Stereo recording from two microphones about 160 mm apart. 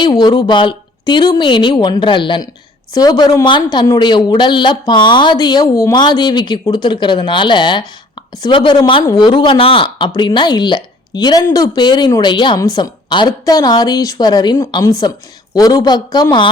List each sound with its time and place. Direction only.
0.0 s a woman's voice: 30° left (ahead or behind)